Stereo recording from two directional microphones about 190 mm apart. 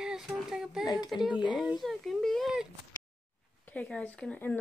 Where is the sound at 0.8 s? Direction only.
20° left (ahead or behind).